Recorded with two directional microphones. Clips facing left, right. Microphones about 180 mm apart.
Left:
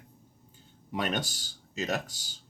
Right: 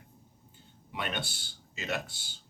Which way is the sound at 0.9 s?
40° left (ahead or behind).